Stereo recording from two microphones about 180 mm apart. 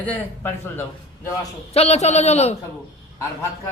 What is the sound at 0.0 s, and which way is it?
A man's voice, 10° left (ahead or behind).